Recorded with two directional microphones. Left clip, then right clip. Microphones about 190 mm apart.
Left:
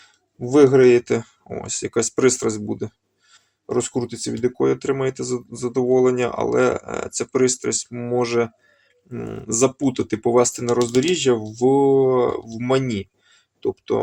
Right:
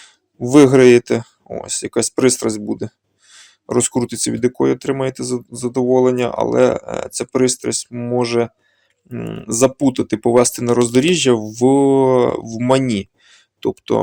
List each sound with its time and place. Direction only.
0.0 s speech: 50° right (ahead or behind)